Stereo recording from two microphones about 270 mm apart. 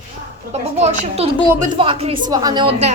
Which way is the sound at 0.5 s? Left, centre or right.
Right.